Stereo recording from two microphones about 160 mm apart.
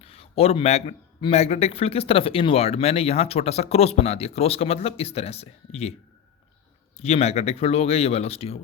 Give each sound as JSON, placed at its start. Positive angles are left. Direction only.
{"t": 0.0, "sound": "speech", "side_deg": 40}
{"t": 6.9, "sound": "speech", "side_deg": 40}